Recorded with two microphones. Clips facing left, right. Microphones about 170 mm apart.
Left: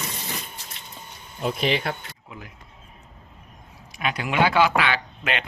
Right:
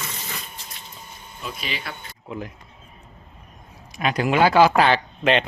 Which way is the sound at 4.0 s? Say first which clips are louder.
Right 4 dB; 40° right (ahead or behind).